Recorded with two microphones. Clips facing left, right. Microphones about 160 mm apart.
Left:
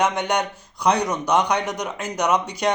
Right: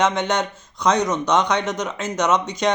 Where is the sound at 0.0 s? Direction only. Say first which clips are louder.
Right 1 dB; 15° left (ahead or behind).